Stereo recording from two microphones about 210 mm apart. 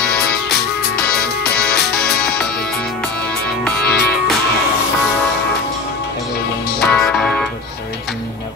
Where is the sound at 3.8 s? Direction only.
50° left (ahead or behind).